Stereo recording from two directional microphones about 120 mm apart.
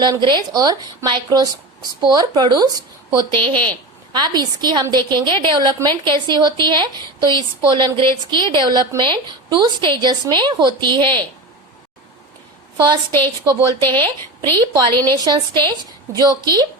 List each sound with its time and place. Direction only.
0.0 s speech: 40° right (ahead or behind)
12.7 s a woman's voice: 40° right (ahead or behind)
13.1 s a woman's voice: 15° left (ahead or behind)
14.8 s speech: 35° right (ahead or behind)